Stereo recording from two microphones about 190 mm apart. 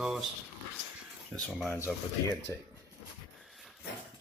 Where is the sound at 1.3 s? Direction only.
15° right (ahead or behind).